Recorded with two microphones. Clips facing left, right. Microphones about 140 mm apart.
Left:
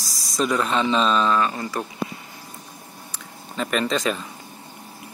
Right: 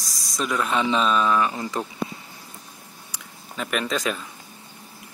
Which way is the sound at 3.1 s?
5° right (ahead or behind).